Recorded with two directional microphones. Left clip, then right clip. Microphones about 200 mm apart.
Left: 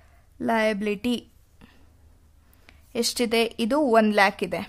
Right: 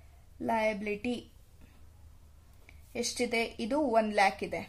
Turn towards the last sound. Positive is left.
turn(degrees=40)  # may be behind; listen again after turning